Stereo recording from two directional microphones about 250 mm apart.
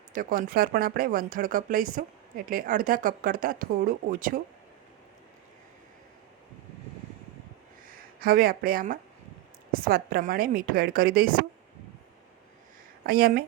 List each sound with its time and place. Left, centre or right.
0.1 s speech: right
7.9 s speech: right
13.1 s speech: right